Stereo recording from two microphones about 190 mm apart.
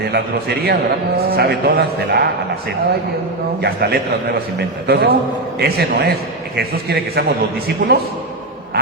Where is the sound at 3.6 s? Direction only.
55° right (ahead or behind).